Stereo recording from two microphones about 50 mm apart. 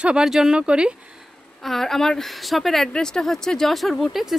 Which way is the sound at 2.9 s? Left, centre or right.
Centre.